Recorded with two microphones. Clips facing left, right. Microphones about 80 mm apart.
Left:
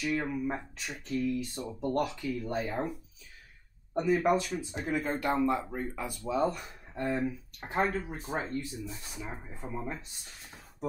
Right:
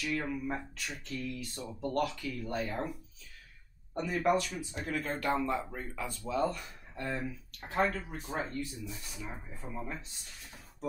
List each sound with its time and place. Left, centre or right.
0.0 s speech: centre
4.2 s speech: centre
9.1 s speech: centre